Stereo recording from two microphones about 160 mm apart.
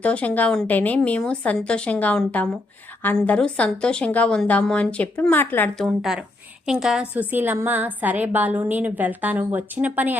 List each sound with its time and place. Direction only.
0.0 s a woman's voice: 10° left (ahead or behind); by 10.2 s 10° right (ahead or behind)